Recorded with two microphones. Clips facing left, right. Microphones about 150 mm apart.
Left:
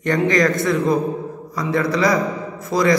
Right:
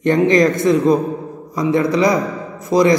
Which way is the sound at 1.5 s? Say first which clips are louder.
Right 5 dB; 20° right (ahead or behind).